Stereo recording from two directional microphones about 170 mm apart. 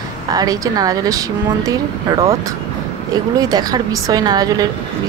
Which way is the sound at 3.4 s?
25° right (ahead or behind).